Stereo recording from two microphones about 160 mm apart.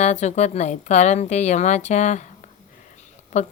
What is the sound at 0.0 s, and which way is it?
A woman's voice, 45° left (ahead or behind).